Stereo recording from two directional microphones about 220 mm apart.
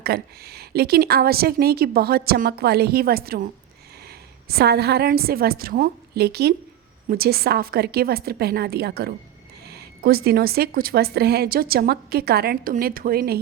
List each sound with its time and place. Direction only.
0.0 s a woman's voice: 45° right (ahead or behind)